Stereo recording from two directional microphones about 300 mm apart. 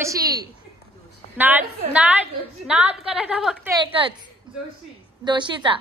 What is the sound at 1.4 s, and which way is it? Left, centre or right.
A woman's voice, centre.